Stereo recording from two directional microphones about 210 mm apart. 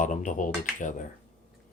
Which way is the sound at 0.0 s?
35° left (ahead or behind).